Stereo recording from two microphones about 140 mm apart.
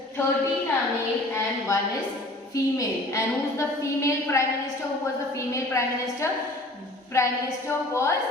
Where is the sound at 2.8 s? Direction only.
20° left (ahead or behind).